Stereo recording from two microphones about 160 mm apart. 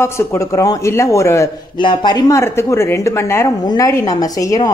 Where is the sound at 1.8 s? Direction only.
30° left (ahead or behind).